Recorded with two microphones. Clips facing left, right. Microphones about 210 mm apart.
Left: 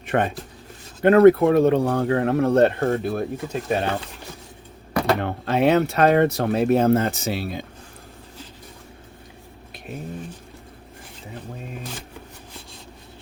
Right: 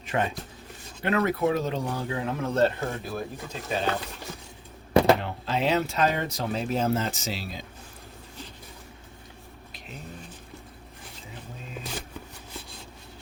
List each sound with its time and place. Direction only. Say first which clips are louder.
0.1 s speech: left 6 dB; 60° left (ahead or behind)
5.2 s speech: left 8 dB; 60° left (ahead or behind)